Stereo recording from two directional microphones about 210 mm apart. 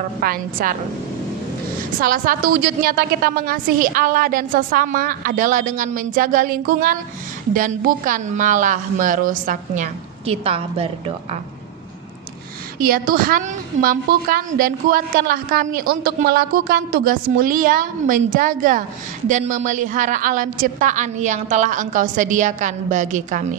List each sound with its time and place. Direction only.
0.2 s a woman's voice: 45° right (ahead or behind)
2.0 s a woman's voice: 40° right (ahead or behind)
12.9 s a woman's voice: 45° right (ahead or behind)